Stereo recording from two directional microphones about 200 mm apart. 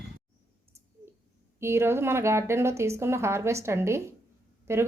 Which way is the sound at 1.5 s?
15° right (ahead or behind).